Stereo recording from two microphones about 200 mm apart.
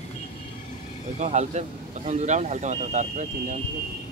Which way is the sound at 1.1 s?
35° right (ahead or behind).